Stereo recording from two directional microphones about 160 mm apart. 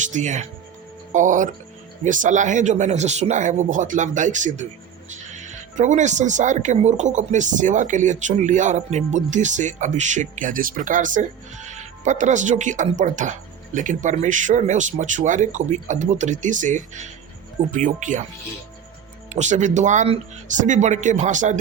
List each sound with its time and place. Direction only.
0.0 s speech: 50° right (ahead or behind)
19.3 s speech: 45° right (ahead or behind)